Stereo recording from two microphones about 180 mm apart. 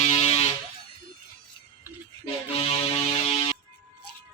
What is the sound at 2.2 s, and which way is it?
Music, 30° left (ahead or behind).